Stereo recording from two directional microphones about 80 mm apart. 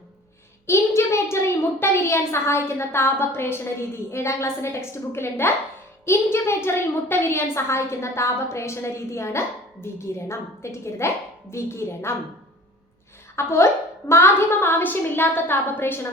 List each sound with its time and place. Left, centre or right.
0.7 s a child's voice: left
13.3 s a child's voice: left